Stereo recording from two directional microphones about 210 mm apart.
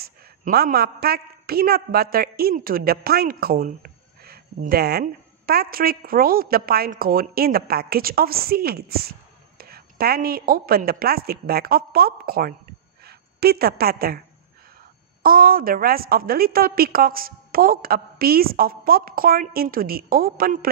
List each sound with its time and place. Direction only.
0.0 s a man's voice: 45° right (ahead or behind)
15.2 s a man's voice: 45° right (ahead or behind)